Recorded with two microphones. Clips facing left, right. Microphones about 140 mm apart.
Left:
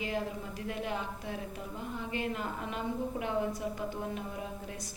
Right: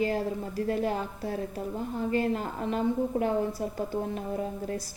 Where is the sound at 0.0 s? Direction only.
40° right (ahead or behind).